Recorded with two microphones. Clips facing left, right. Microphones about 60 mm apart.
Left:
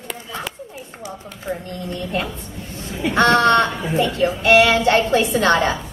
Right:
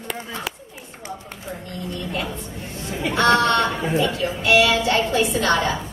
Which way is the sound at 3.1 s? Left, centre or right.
Left.